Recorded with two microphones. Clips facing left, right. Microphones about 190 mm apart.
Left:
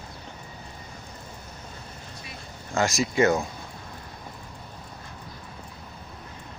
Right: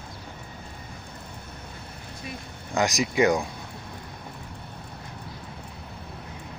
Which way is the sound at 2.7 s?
15° right (ahead or behind).